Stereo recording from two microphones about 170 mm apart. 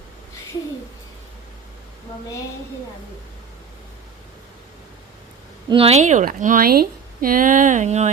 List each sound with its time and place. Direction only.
5.6 s speech: 30° right (ahead or behind)